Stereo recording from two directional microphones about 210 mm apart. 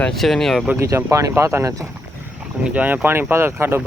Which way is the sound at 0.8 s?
15° right (ahead or behind).